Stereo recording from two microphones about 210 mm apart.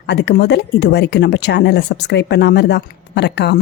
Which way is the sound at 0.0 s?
55° left (ahead or behind).